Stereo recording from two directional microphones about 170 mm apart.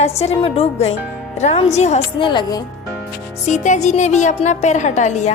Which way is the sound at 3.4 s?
45° left (ahead or behind).